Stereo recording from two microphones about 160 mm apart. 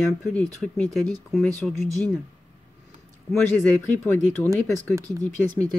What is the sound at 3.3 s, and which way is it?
Speech, 10° left (ahead or behind).